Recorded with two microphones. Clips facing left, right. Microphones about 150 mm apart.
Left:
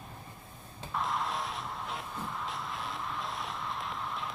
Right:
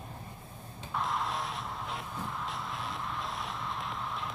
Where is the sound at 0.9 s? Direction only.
Centre (ahead or behind).